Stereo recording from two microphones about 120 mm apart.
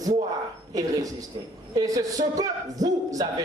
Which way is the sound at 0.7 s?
30° right (ahead or behind).